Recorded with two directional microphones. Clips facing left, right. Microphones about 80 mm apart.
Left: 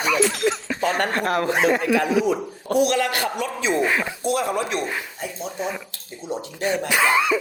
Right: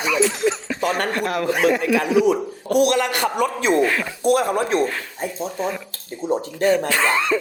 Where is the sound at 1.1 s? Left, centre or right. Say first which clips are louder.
Left 1 dB; left.